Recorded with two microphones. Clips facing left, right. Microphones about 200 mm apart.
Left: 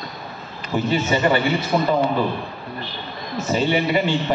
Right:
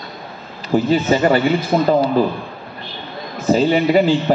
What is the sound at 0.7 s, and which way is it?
A man's voice, 40° right (ahead or behind).